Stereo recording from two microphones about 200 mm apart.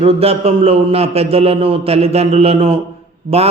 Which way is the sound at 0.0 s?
30° right (ahead or behind).